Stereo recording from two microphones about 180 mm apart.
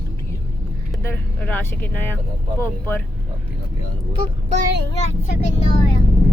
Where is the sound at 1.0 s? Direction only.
10° left (ahead or behind).